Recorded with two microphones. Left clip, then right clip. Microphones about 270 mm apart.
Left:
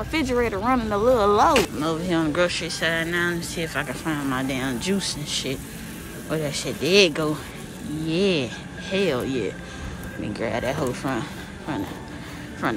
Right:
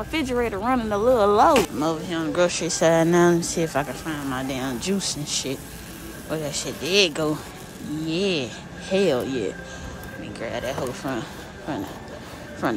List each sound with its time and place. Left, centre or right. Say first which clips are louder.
0.1 s speech: left 2 dB; centre
3.8 s speech: left 2 dB; centre